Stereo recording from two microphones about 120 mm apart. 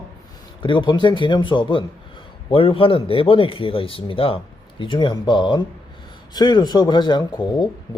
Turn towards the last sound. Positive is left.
turn(degrees=35)  # may be behind; listen again after turning